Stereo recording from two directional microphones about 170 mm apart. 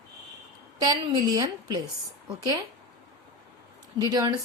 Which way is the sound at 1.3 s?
25° right (ahead or behind).